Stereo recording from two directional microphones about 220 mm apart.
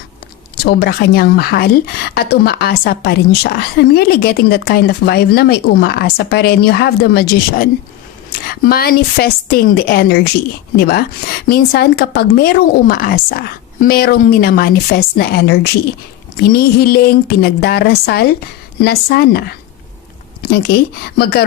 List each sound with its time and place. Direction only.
0.5 s a woman's voice: 45° left (ahead or behind)
21.2 s a woman's voice: 45° left (ahead or behind)